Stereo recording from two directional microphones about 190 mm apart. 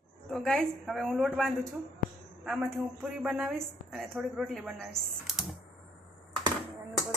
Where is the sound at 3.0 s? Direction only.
Centre (ahead or behind).